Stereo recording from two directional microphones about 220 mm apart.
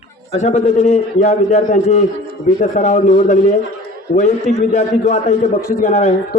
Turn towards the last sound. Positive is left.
turn(degrees=30)  # may be behind; listen again after turning